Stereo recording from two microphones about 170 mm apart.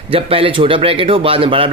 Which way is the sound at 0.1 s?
30° right (ahead or behind).